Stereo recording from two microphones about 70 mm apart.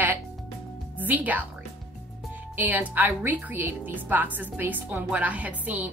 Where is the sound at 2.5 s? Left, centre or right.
Right.